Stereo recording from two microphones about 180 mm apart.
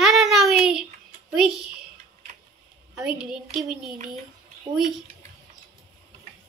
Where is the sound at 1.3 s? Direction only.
5° right (ahead or behind).